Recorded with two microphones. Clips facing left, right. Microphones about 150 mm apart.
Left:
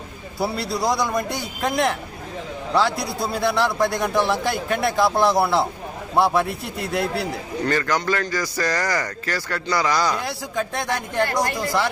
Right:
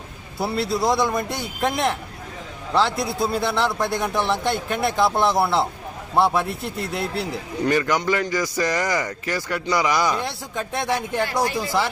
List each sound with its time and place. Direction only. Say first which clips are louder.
0.3 s a man's voice: right 1 dB; centre (ahead or behind)
7.6 s a man's voice: right 2 dB; 15° right (ahead or behind)
10.2 s a man's voice: left 2 dB; centre (ahead or behind)